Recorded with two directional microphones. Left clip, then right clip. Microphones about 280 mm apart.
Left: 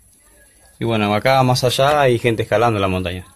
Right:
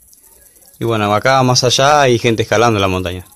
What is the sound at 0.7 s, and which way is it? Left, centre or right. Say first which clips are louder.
Speech: right 4 dB; centre.